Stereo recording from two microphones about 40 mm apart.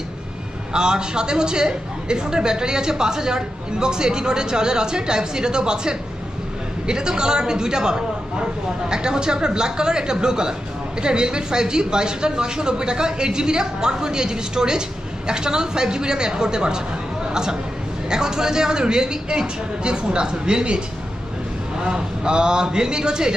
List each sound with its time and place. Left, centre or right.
0.7 s a woman's voice: centre